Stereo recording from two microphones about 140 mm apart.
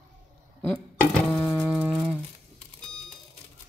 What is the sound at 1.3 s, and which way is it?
Printer, 15° left (ahead or behind).